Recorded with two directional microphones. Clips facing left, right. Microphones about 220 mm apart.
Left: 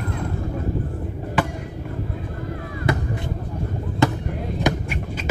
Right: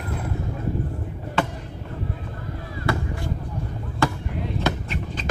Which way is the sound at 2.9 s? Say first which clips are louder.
Left 2 dB; 20° left (ahead or behind).